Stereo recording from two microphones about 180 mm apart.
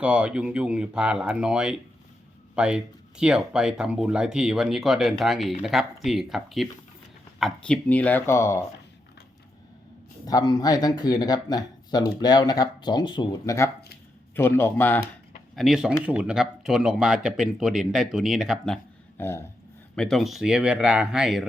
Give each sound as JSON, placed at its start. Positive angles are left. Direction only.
{"t": 0.0, "sound": "speech", "side_deg": -5}
{"t": 10.2, "sound": "speech", "side_deg": 20}
{"t": 15.5, "sound": "speech", "side_deg": -5}
{"t": 19.2, "sound": "speech", "side_deg": 15}
{"t": 20.0, "sound": "speech", "side_deg": 0}